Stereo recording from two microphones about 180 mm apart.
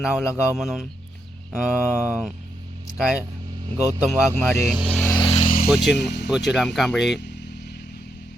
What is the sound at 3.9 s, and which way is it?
Speech, 10° right (ahead or behind).